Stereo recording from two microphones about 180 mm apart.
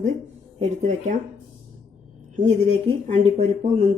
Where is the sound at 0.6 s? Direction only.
40° right (ahead or behind).